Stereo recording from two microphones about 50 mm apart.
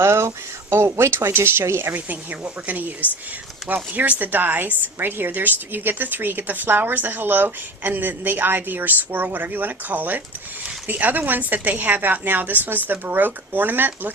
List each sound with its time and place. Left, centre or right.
0.0 s speech: right
2.0 s a woman's voice: right
3.6 s speech: centre
4.2 s a woman's voice: right